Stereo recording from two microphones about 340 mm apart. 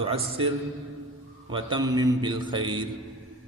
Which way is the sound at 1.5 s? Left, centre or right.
Centre.